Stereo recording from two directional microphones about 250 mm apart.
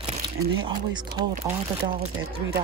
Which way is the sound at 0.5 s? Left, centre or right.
Centre.